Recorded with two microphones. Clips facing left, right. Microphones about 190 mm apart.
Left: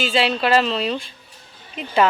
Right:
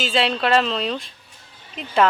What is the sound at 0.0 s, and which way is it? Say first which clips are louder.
Speech: left 1 dB; centre (ahead or behind).